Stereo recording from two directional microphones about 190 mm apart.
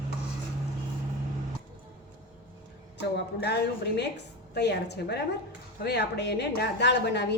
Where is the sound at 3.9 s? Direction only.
60° left (ahead or behind).